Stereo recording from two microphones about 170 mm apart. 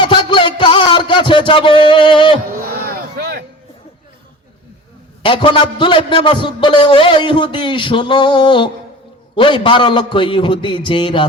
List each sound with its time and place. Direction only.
0.0 s music: 30° left (ahead or behind)
2.6 s a sound: 60° right (ahead or behind)
5.2 s a man's voice: 30° left (ahead or behind)